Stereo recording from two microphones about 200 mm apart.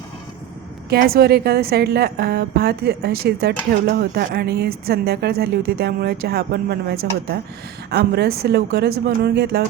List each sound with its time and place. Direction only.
0.9 s a woman's voice: 50° right (ahead or behind)